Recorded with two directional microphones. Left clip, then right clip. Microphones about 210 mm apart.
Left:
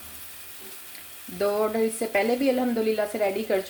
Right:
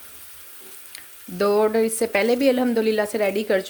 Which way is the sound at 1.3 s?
55° right (ahead or behind).